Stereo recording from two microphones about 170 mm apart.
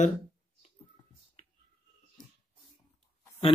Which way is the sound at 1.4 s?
45° left (ahead or behind).